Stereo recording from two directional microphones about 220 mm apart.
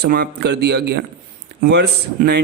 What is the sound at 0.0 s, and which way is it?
Speech, 45° right (ahead or behind).